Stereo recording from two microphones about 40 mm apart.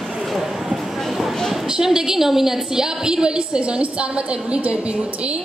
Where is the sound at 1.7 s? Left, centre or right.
Centre.